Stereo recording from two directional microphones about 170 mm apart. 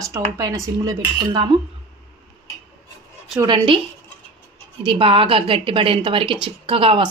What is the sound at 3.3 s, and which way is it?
Speech, 25° right (ahead or behind).